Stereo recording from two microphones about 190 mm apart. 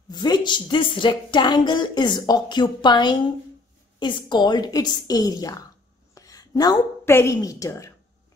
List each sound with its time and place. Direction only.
0.1 s a woman's voice: 20° left (ahead or behind)